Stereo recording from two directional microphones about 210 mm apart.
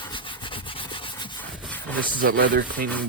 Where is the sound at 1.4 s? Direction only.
10° left (ahead or behind).